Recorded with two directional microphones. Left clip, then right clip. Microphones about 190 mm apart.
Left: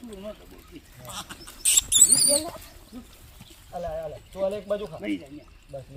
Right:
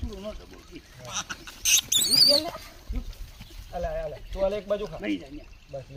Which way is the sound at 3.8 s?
15° right (ahead or behind).